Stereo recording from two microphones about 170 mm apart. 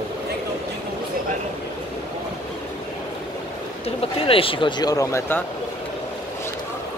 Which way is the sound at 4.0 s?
35° left (ahead or behind).